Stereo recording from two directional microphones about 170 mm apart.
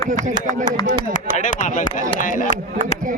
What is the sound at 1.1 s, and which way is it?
A man's voice, 50° left (ahead or behind).